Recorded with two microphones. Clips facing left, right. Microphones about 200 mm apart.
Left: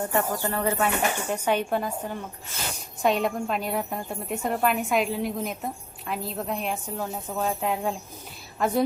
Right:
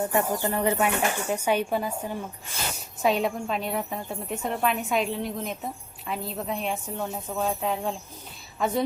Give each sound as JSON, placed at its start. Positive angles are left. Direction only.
{"t": 0.0, "sound": "a woman's voice", "side_deg": -15}